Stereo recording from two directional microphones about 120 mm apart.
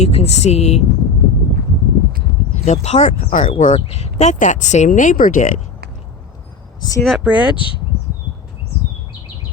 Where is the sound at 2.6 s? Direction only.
75° left (ahead or behind); by 3.5 s 90° left.